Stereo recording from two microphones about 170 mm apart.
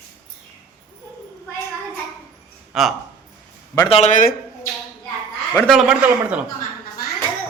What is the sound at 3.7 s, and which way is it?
Speech, 35° left (ahead or behind).